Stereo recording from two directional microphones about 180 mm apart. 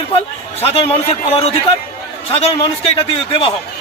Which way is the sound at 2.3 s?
35° left (ahead or behind).